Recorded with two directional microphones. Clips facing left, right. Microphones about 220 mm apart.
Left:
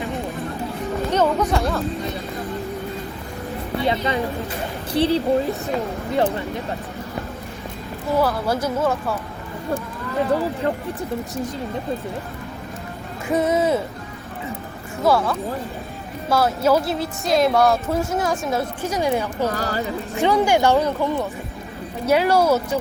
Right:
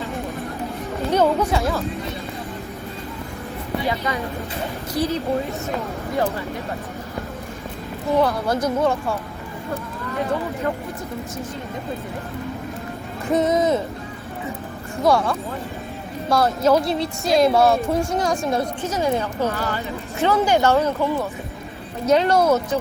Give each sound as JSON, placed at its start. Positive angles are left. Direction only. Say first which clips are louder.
{"t": 1.1, "sound": "chatter", "louder": "right 2 dB", "side_deg": -10}
{"t": 1.5, "sound": "speech", "louder": "even", "side_deg": 0}
{"t": 3.8, "sound": "speech", "louder": "left 5 dB", "side_deg": 30}
{"t": 8.2, "sound": "speech", "louder": "even", "side_deg": 5}
{"t": 13.2, "sound": "speech", "louder": "right 1 dB", "side_deg": 10}
{"t": 15.0, "sound": "speech", "louder": "even", "side_deg": 0}
{"t": 18.9, "sound": "speech", "louder": "left 2 dB", "side_deg": 15}
{"t": 19.5, "sound": "speech", "louder": "left 1 dB", "side_deg": 40}
{"t": 20.1, "sound": "speech", "louder": "left 1 dB", "side_deg": 15}